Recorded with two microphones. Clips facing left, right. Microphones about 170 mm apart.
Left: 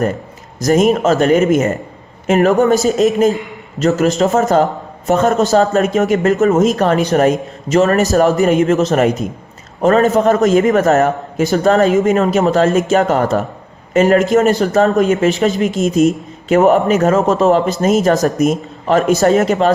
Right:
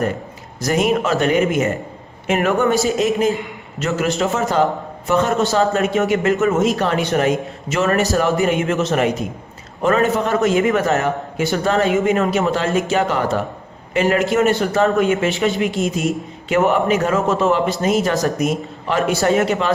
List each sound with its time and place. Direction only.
0.6 s a man's voice: 40° left (ahead or behind)